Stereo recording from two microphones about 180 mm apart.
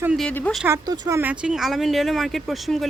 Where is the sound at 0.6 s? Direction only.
20° right (ahead or behind).